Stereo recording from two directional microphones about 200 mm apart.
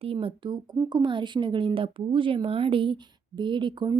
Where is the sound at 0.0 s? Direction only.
25° right (ahead or behind).